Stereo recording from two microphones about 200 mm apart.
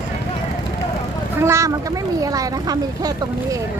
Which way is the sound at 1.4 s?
15° right (ahead or behind).